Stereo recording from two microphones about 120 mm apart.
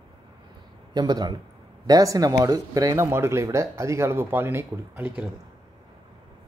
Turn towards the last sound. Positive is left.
turn(degrees=-15)  # may be behind; listen again after turning